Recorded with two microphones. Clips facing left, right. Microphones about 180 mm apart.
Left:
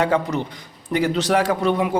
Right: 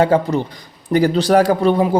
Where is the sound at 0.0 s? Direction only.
30° right (ahead or behind).